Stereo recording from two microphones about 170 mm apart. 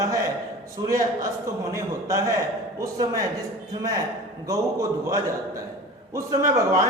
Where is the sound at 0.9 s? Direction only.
20° right (ahead or behind).